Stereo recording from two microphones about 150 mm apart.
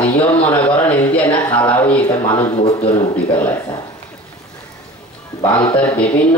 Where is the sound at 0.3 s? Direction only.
10° left (ahead or behind).